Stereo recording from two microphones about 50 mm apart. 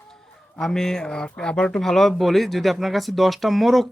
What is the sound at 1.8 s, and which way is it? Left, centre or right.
Speech, centre.